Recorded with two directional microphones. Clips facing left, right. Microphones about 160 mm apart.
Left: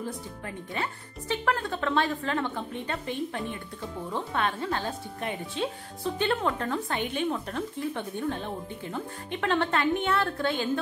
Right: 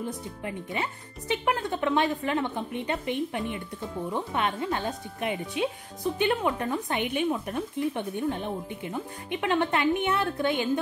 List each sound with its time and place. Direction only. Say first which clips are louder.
0.4 s speech: right 2 dB; 15° right (ahead or behind)